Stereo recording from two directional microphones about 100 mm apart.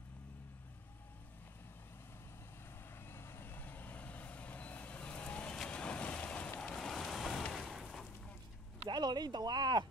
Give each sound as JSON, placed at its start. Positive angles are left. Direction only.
{"t": 3.1, "sound": "vehicle", "side_deg": 25}
{"t": 7.8, "sound": "a sound", "side_deg": 5}
{"t": 8.8, "sound": "speech", "side_deg": -45}